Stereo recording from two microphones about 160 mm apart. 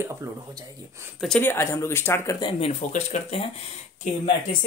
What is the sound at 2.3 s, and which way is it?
Speech, 30° left (ahead or behind).